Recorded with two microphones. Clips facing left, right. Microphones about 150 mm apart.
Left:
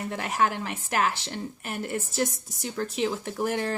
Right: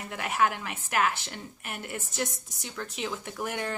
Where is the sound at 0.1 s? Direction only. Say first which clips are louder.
Even; 35° left (ahead or behind).